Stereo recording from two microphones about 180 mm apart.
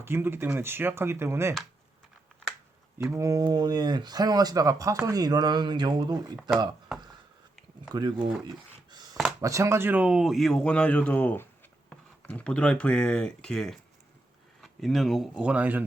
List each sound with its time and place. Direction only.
0.0 s speech: 15° right (ahead or behind)
3.1 s speech: 15° right (ahead or behind)
7.9 s speech: 25° right (ahead or behind)
8.9 s a sound: 20° right (ahead or behind)
9.4 s speech: 15° right (ahead or behind)